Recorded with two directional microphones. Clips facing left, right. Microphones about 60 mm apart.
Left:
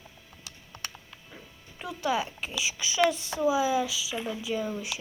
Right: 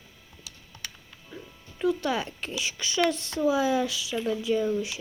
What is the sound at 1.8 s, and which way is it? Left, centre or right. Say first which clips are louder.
Speech: right 3 dB; centre.